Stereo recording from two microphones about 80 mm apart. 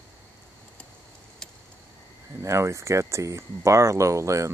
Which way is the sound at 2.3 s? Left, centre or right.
Right.